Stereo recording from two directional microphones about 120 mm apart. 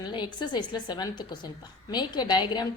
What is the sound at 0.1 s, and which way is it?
A woman's voice, 40° left (ahead or behind).